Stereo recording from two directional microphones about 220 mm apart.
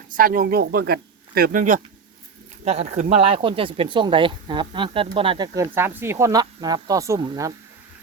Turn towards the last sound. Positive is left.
turn(degrees=-20)  # may be behind; listen again after turning